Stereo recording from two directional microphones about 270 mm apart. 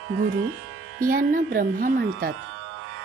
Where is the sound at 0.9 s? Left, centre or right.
Right.